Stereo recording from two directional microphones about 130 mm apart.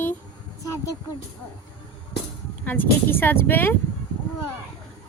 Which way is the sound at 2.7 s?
15° left (ahead or behind).